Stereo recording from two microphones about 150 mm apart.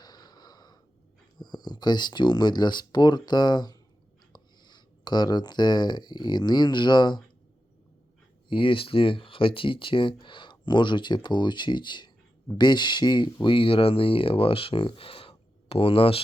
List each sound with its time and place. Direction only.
0.0 s snort: 25° left (ahead or behind)
1.4 s speech: 30° left (ahead or behind)
8.4 s speech: 35° left (ahead or behind)